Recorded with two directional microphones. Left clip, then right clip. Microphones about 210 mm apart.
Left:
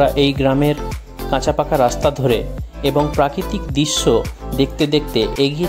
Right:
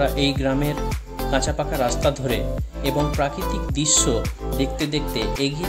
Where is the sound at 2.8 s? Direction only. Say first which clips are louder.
Left 7 dB; 30° left (ahead or behind).